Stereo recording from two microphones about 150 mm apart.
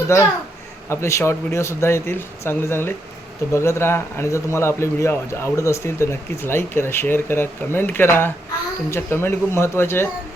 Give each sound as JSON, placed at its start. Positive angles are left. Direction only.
{"t": 0.1, "sound": "a child's voice", "side_deg": 20}